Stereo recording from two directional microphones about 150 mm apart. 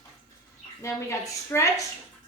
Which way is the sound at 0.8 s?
20° left (ahead or behind).